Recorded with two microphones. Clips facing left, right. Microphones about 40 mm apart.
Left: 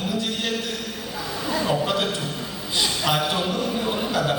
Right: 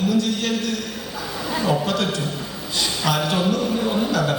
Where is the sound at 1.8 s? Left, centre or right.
Centre.